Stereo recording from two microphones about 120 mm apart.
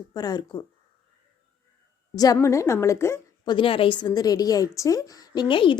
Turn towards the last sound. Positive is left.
turn(degrees=45)  # may be behind; listen again after turning